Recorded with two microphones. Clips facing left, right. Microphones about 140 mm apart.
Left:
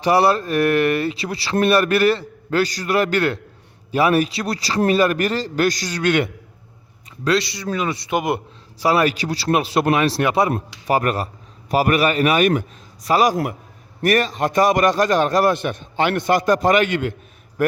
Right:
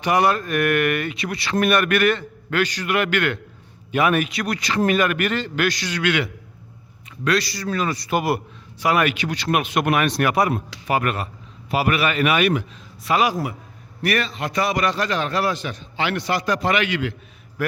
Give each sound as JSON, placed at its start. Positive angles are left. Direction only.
{"t": 0.0, "sound": "speech", "side_deg": 30}
{"t": 7.3, "sound": "a man's voice", "side_deg": 25}
{"t": 8.8, "sound": "speech", "side_deg": 35}
{"t": 10.8, "sound": "a man's voice", "side_deg": 40}